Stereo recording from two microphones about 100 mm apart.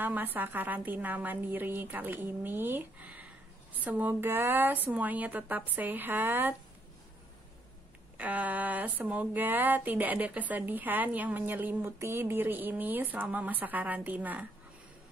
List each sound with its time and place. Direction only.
0.0 s a woman's voice: 20° right (ahead or behind)
8.2 s speech: 15° right (ahead or behind)